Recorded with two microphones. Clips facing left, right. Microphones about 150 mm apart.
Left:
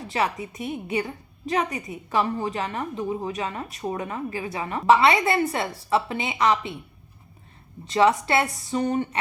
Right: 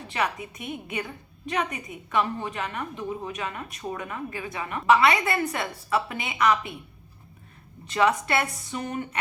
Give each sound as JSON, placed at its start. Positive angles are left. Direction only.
{"t": 0.1, "sound": "a woman's voice", "side_deg": 35}
{"t": 7.9, "sound": "a woman's voice", "side_deg": 30}